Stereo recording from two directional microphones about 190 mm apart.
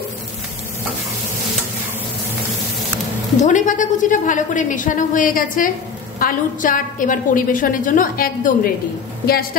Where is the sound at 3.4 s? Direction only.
40° left (ahead or behind).